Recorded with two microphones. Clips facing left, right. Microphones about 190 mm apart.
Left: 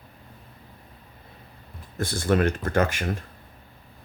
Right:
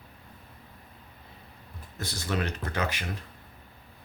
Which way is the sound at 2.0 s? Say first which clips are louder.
Left 9 dB; 50° left (ahead or behind).